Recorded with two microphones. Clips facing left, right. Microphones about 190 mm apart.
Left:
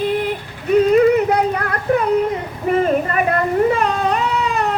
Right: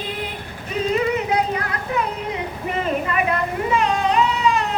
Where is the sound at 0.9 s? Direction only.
55° left (ahead or behind).